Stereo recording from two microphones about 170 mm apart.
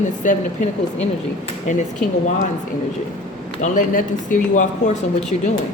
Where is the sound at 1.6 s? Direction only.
45° left (ahead or behind).